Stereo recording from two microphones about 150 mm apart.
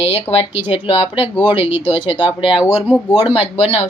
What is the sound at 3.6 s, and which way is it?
Speech, 45° left (ahead or behind).